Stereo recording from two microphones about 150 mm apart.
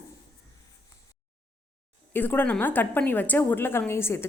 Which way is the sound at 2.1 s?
15° left (ahead or behind).